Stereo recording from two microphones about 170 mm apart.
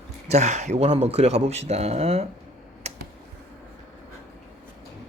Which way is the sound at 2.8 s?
40° right (ahead or behind).